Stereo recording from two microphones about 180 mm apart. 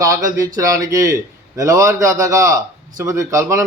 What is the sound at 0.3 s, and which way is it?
A man's voice, 20° right (ahead or behind).